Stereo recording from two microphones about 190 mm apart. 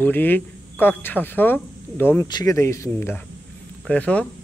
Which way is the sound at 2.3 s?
20° left (ahead or behind).